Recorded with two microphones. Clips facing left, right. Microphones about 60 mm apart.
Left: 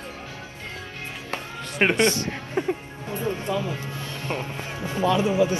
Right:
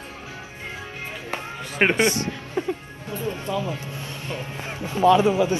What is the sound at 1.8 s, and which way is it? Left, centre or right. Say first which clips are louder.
Speech: right 1 dB; centre.